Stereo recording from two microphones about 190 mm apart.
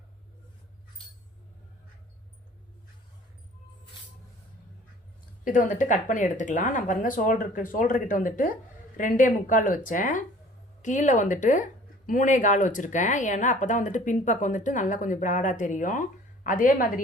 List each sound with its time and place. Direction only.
5.5 s speech: 45° left (ahead or behind)